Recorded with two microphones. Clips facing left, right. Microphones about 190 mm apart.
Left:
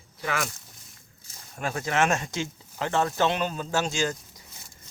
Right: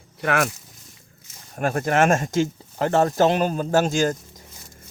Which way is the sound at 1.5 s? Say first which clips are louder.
Right 6 dB; 55° right (ahead or behind).